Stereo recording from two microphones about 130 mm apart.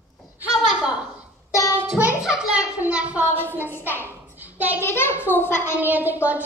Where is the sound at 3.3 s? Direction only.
15° right (ahead or behind).